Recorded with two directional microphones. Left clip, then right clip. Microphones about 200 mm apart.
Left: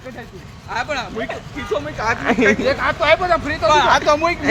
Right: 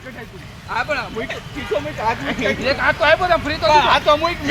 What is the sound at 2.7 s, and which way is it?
Speech, 20° left (ahead or behind).